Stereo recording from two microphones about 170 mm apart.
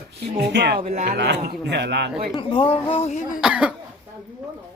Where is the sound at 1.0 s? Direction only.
75° right (ahead or behind); by 2.0 s 90° right.